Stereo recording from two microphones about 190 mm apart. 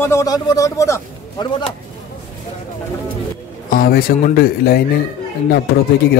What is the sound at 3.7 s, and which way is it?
Speech, 50° left (ahead or behind).